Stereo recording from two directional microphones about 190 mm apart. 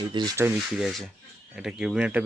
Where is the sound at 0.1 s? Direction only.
25° right (ahead or behind).